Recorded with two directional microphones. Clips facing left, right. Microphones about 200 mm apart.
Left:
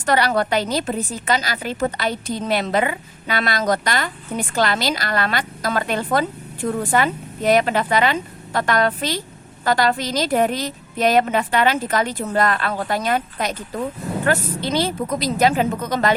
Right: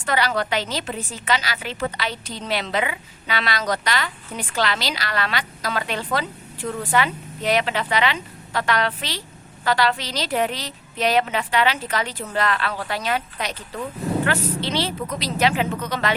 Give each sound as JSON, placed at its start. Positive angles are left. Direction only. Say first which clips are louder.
{"t": 0.0, "sound": "a woman's voice", "louder": "left 4 dB", "side_deg": 45}